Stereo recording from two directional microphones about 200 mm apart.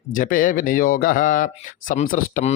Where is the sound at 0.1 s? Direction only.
40° left (ahead or behind).